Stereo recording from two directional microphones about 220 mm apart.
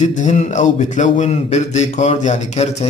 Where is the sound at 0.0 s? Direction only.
35° left (ahead or behind).